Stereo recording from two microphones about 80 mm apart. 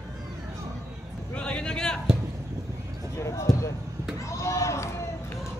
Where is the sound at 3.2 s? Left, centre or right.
Left.